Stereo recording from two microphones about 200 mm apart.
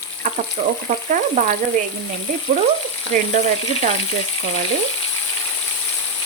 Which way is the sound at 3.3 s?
35° right (ahead or behind).